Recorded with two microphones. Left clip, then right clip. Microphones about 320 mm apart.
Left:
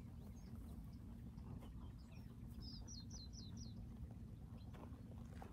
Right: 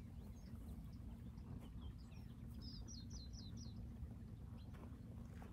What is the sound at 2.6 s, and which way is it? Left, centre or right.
Bird, centre.